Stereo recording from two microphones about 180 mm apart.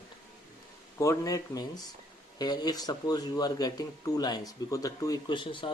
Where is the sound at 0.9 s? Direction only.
20° left (ahead or behind).